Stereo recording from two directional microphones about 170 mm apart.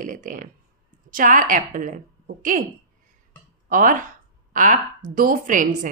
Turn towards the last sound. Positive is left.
turn(degrees=-50)  # may be behind; listen again after turning